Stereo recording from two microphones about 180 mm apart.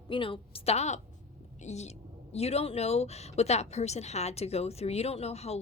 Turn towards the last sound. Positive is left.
turn(degrees=35)  # may be behind; listen again after turning